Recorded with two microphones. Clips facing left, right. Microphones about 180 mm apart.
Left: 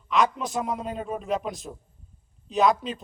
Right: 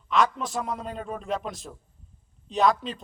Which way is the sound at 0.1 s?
Centre (ahead or behind).